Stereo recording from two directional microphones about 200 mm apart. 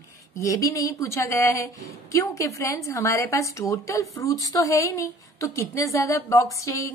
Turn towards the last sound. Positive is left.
turn(degrees=15)  # may be behind; listen again after turning